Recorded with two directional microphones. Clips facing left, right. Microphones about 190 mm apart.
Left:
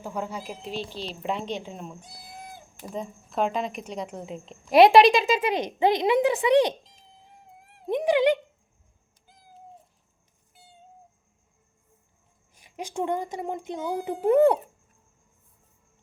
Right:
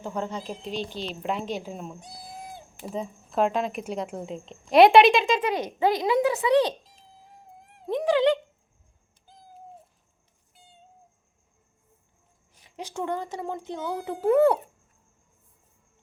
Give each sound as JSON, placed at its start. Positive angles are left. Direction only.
{"t": 0.0, "sound": "a child's voice", "side_deg": 10}
{"t": 5.5, "sound": "speech", "side_deg": 20}
{"t": 7.9, "sound": "speech", "side_deg": 20}
{"t": 12.5, "sound": "a child's voice", "side_deg": 15}